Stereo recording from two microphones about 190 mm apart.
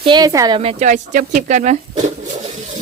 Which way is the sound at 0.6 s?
35° right (ahead or behind).